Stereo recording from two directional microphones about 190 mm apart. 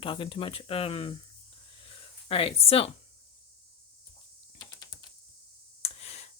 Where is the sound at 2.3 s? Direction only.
30° left (ahead or behind).